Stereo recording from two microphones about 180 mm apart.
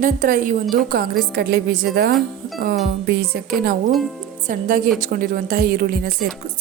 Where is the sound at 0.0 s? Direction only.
50° right (ahead or behind).